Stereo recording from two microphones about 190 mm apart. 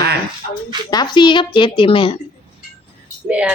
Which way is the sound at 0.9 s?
20° left (ahead or behind).